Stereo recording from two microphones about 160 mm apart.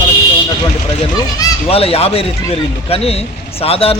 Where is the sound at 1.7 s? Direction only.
40° left (ahead or behind).